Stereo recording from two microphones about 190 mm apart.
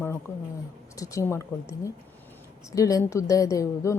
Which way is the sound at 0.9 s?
15° left (ahead or behind).